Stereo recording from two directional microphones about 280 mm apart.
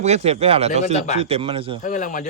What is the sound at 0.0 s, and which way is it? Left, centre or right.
Speech, right.